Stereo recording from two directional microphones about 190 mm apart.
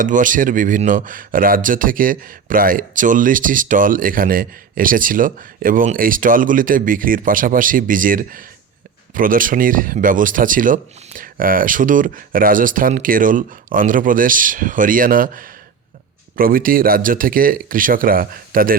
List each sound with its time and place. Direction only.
0.0 s speech: 45° right (ahead or behind)